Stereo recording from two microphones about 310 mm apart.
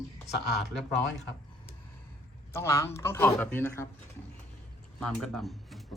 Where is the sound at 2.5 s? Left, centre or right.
Centre.